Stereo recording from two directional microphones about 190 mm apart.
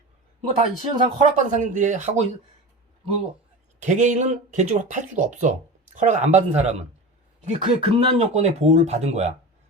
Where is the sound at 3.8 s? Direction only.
40° right (ahead or behind).